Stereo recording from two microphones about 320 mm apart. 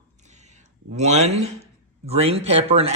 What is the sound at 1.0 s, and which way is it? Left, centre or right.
Speech, right.